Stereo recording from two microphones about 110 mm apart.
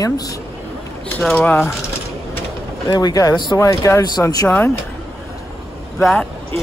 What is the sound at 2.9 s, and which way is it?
Speech, 35° left (ahead or behind).